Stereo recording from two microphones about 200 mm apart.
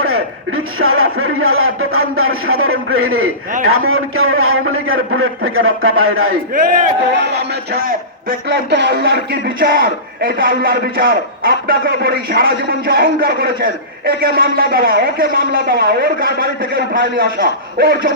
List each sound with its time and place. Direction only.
0.0 s a man's voice: 90° right
6.5 s a man's voice: 45° right (ahead or behind)